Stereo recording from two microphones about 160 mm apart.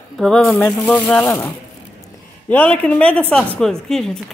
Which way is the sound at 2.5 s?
10° left (ahead or behind).